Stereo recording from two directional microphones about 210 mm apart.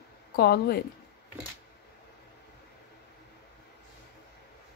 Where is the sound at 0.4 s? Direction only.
50° left (ahead or behind).